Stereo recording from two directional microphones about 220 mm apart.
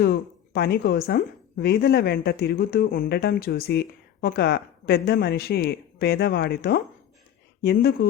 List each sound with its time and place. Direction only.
0.0 s a woman's voice: 50° left (ahead or behind)